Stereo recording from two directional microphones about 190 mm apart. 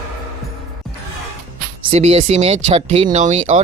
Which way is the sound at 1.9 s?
35° right (ahead or behind).